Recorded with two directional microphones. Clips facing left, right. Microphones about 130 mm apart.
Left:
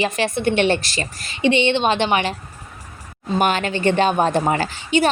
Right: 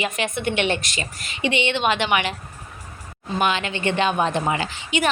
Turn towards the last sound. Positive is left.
turn(degrees=35)  # may be behind; listen again after turning